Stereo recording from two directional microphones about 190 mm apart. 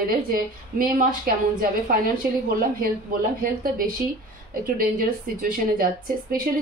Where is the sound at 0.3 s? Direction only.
50° right (ahead or behind).